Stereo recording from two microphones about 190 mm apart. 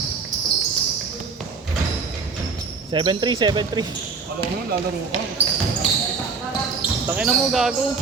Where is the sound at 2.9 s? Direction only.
25° right (ahead or behind).